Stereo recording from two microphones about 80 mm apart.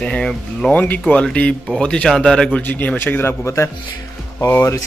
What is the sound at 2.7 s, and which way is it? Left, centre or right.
Speech, left.